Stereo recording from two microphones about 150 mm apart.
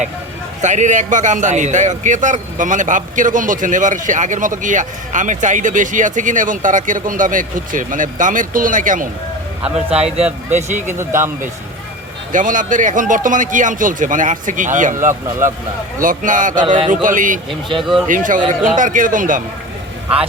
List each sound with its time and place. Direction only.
0.6 s a man's voice: 55° right (ahead or behind)
9.6 s a man's voice: 5° right (ahead or behind)
10.5 s speech: 50° right (ahead or behind)
10.9 s a man's voice: 15° right (ahead or behind)
12.3 s a man's voice: 60° right (ahead or behind)
16.0 s a man's voice: 60° right (ahead or behind)
16.6 s speech: 35° right (ahead or behind)
16.9 s a man's voice: 60° right (ahead or behind)
17.7 s speech: centre (ahead or behind)
18.1 s a man's voice: 60° right (ahead or behind)